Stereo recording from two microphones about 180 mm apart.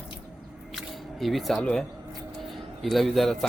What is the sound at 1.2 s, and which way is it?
A man's voice, centre (ahead or behind).